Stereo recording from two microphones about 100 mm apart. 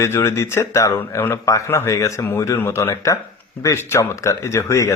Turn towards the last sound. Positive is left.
turn(degrees=30)  # may be behind; listen again after turning